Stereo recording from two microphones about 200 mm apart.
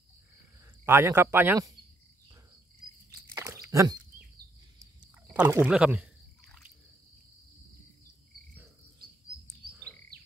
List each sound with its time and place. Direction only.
0.8 s speech: 10° right (ahead or behind)
3.3 s a sound: 15° right (ahead or behind)
5.3 s pour: 10° right (ahead or behind)